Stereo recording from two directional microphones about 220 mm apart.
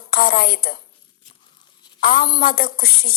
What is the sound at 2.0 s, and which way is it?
A woman's voice, 40° left (ahead or behind).